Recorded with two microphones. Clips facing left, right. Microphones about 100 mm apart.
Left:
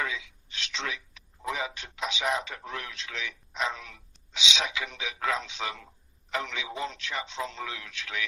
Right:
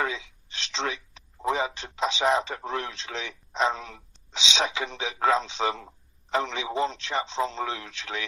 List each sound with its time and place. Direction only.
0.0 s a man's voice: 30° right (ahead or behind)